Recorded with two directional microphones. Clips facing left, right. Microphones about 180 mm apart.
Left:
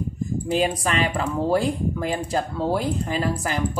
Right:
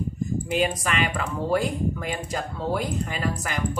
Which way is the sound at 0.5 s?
30° left (ahead or behind).